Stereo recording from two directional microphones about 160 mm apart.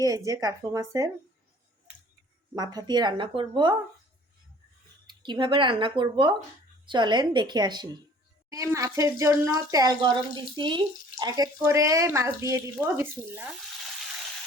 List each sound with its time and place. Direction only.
0.0 s speech: 20° right (ahead or behind)
2.6 s speech: 25° right (ahead or behind)
5.0 s speech: 30° right (ahead or behind); by 13.5 s 15° right (ahead or behind)